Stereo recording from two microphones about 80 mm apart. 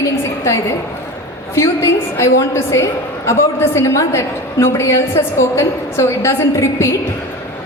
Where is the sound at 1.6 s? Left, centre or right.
Left.